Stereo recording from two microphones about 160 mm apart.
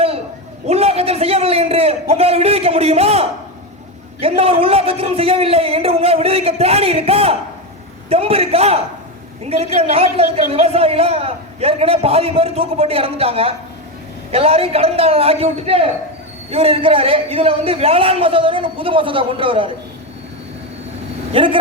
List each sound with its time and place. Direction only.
0.7 s a man's voice: 40° right (ahead or behind)
21.3 s a man's voice: 35° right (ahead or behind)